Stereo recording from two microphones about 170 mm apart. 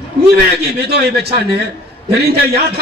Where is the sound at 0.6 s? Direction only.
70° right (ahead or behind).